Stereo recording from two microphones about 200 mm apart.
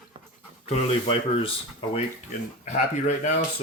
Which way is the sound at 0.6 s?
30° left (ahead or behind).